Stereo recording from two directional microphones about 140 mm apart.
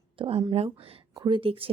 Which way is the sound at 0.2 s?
45° right (ahead or behind).